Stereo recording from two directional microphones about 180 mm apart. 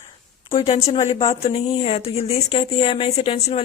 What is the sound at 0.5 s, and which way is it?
Speech, 35° left (ahead or behind).